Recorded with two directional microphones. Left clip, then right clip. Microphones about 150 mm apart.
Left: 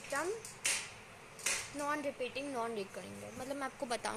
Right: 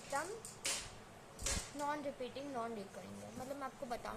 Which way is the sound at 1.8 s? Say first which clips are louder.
Left 3 dB; 65° left (ahead or behind).